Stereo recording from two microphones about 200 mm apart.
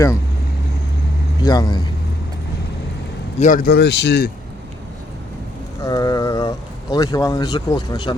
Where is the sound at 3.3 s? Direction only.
40° left (ahead or behind); by 4.3 s 55° left (ahead or behind).